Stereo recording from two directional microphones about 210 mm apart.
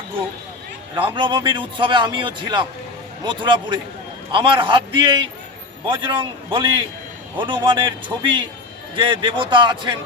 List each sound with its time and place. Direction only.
0.9 s a man's voice: 20° right (ahead or behind)